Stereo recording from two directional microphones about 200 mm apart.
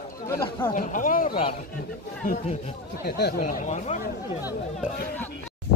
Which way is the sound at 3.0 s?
55° left (ahead or behind).